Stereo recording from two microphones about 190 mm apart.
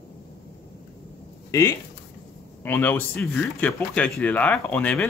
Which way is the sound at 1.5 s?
15° left (ahead or behind).